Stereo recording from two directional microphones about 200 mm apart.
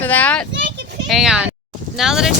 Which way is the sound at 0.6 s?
60° right (ahead or behind).